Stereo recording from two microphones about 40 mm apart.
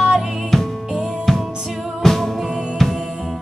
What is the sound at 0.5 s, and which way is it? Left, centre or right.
Music, centre.